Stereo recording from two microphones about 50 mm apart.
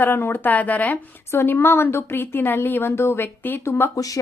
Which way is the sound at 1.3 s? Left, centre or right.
Left.